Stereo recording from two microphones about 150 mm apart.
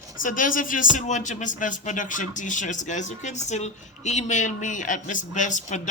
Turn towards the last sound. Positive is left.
turn(degrees=55)  # may be behind; listen again after turning